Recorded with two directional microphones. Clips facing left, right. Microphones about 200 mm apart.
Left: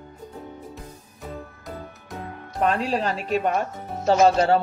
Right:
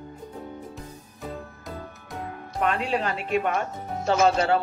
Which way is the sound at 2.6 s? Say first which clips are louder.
Left 3 dB; 35° left (ahead or behind).